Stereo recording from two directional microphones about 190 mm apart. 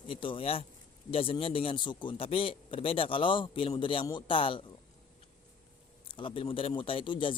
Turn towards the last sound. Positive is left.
turn(degrees=25)  # may be behind; listen again after turning